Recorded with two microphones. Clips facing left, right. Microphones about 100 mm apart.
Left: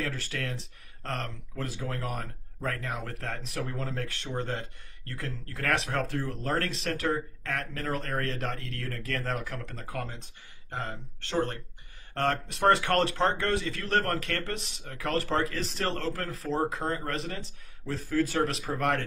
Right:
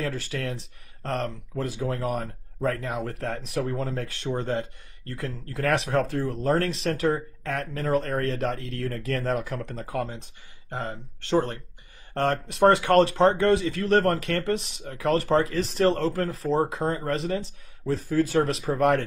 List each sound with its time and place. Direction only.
0.0 s speech: 15° right (ahead or behind)